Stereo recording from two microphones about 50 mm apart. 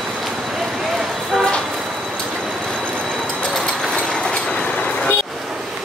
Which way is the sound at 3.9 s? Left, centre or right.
Centre.